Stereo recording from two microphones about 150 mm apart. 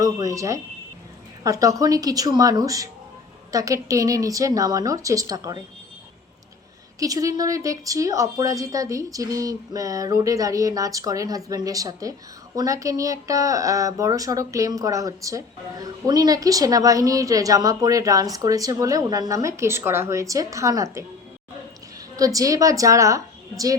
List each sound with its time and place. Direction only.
0.0 s speech: 25° right (ahead or behind)
7.0 s speech: 25° right (ahead or behind)
22.1 s speech: 25° right (ahead or behind)